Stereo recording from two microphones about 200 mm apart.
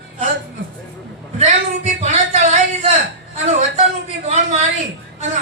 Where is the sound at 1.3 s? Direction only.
35° right (ahead or behind).